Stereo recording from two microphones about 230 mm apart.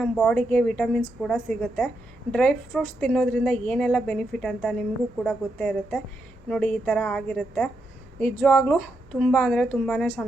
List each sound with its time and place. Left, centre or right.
0.0 s a woman's voice: centre